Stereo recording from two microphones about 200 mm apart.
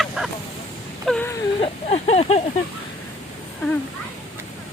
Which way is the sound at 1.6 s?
30° left (ahead or behind).